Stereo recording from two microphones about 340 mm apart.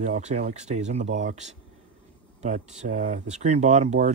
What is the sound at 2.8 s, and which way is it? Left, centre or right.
Speech, right.